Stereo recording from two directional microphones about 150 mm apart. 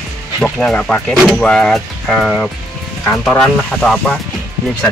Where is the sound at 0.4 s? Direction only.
5° left (ahead or behind).